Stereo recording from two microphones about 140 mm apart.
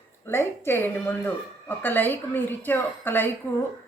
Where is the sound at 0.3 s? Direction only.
15° left (ahead or behind).